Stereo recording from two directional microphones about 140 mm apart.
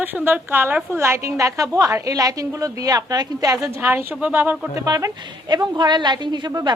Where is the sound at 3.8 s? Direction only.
15° right (ahead or behind).